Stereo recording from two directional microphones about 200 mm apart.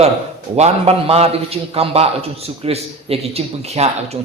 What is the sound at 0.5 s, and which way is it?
A man's voice, 30° right (ahead or behind).